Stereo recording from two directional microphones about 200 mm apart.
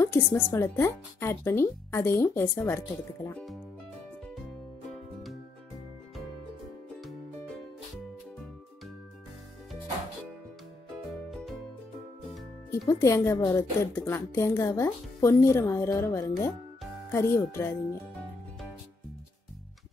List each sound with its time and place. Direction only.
0.0 s a woman's voice: 15° left (ahead or behind)
11.1 s music: centre (ahead or behind)
12.7 s a woman's voice: 15° left (ahead or behind)